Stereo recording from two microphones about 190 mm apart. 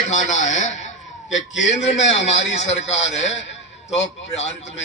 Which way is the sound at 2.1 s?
35° left (ahead or behind).